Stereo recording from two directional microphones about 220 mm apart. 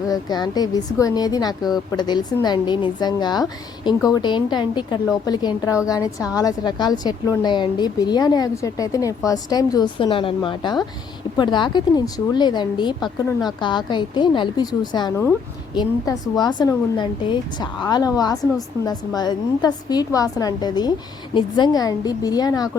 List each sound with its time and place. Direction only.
0.1 s a woman's voice: 20° left (ahead or behind)